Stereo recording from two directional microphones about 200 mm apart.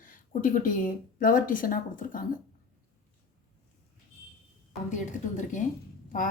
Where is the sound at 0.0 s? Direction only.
45° left (ahead or behind).